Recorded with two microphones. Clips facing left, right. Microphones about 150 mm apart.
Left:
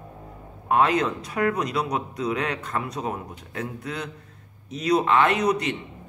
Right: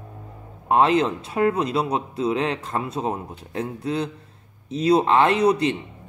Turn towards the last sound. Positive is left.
turn(degrees=-30)  # may be behind; listen again after turning